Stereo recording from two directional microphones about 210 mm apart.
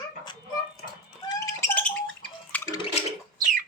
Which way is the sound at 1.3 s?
15° left (ahead or behind).